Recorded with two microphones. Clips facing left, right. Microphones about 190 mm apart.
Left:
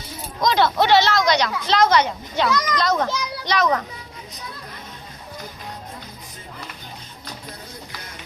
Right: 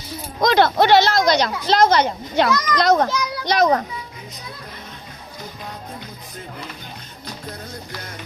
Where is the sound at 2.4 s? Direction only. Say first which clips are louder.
Right 3 dB; 65° right (ahead or behind).